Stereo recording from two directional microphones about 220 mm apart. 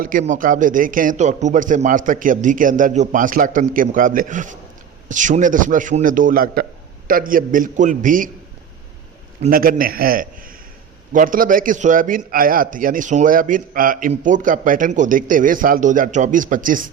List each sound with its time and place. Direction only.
0.0 s a man's voice: 40° right (ahead or behind)
9.4 s a man's voice: 40° right (ahead or behind)